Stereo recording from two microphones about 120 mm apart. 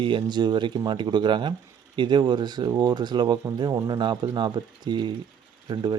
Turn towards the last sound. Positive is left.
turn(degrees=-35)  # may be behind; listen again after turning